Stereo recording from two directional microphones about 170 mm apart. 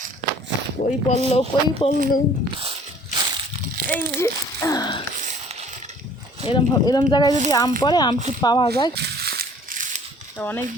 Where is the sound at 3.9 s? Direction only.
10° left (ahead or behind).